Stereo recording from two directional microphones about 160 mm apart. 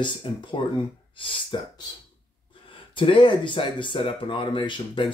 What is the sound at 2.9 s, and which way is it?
Speech, 30° left (ahead or behind).